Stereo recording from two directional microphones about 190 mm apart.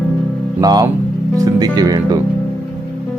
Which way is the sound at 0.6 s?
20° right (ahead or behind).